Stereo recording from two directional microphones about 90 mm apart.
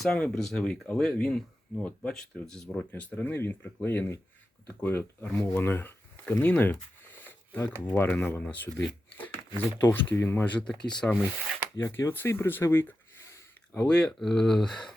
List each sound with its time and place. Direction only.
0.0 s speech: 5° left (ahead or behind); by 6.3 s 25° left (ahead or behind)
6.4 s a sound: 20° left (ahead or behind)
7.9 s speech: 15° left (ahead or behind)
11.8 s speech: 30° left (ahead or behind)
13.7 s speech: 10° left (ahead or behind)